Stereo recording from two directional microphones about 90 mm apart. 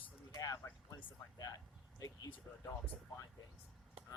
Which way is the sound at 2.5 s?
30° left (ahead or behind).